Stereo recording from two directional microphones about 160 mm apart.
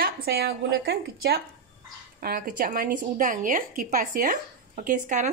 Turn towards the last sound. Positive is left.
turn(degrees=-50)  # may be behind; listen again after turning